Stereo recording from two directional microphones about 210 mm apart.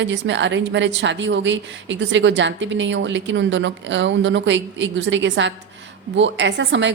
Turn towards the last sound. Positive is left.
turn(degrees=-60)  # may be behind; listen again after turning